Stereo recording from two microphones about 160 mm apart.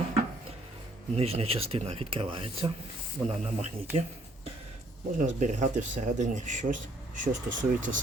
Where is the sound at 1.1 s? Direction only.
40° right (ahead or behind).